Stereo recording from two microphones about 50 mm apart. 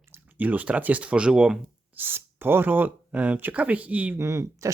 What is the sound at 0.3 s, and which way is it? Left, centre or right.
Speech, right.